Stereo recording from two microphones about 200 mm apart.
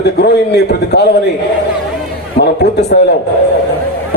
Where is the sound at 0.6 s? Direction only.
55° left (ahead or behind).